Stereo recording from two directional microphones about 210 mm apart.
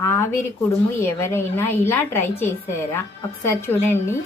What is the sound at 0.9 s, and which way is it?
A woman's voice, 10° left (ahead or behind).